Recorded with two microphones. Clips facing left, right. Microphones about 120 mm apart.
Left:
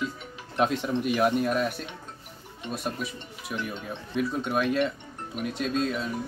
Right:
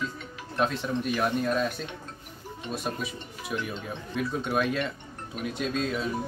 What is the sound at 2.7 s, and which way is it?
Speech, centre (ahead or behind).